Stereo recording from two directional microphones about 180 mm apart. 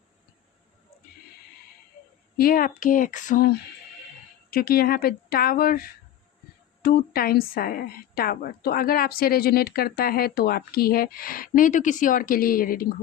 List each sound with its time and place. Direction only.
2.4 s a woman's voice: 55° left (ahead or behind)